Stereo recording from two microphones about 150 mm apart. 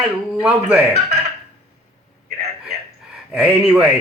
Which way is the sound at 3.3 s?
5° right (ahead or behind).